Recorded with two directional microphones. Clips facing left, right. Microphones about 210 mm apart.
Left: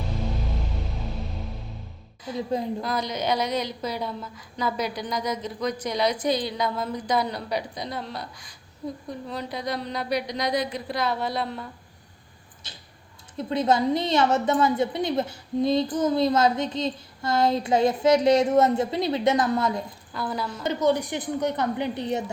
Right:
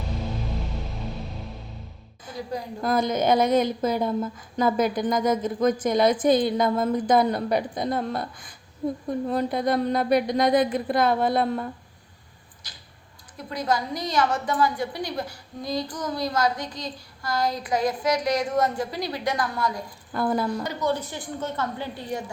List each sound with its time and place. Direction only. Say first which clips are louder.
2.3 s a woman's voice: left 5 dB; 25° left (ahead or behind)
2.8 s a woman's voice: right 5 dB; 50° right (ahead or behind)
12.6 s tick-tock: left 3 dB; 25° left (ahead or behind)
13.3 s a woman's voice: left 4 dB; 25° left (ahead or behind)
20.1 s a woman's voice: right 6 dB; 50° right (ahead or behind)
20.7 s a woman's voice: left 4 dB; 15° left (ahead or behind)